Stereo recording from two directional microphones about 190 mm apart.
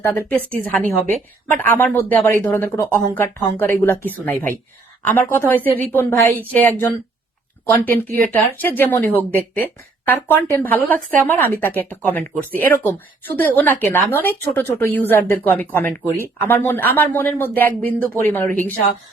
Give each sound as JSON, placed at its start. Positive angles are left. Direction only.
{"t": 0.0, "sound": "speech", "side_deg": 10}
{"t": 8.2, "sound": "speech", "side_deg": 10}